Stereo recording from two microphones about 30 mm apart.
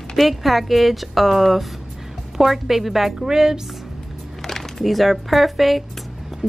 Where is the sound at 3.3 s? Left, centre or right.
Centre.